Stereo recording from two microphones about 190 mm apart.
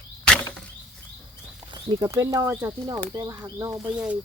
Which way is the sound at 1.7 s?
20° right (ahead or behind).